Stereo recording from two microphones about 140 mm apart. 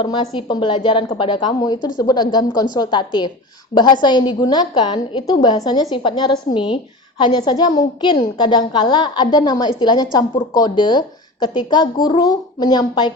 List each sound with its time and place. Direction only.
0.0 s a woman's voice: 35° left (ahead or behind)